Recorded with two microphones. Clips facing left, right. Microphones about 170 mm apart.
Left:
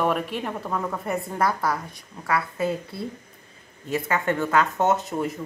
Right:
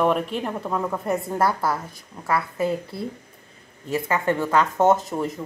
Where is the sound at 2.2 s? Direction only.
20° right (ahead or behind).